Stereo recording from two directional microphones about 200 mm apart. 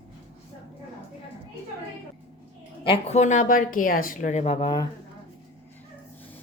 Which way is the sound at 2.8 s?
30° left (ahead or behind).